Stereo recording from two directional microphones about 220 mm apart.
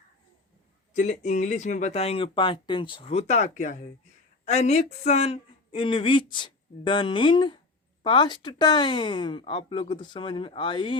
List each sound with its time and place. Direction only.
0.9 s speech: 30° left (ahead or behind)